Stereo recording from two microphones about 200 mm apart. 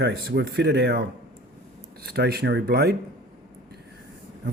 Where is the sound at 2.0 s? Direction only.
55° right (ahead or behind).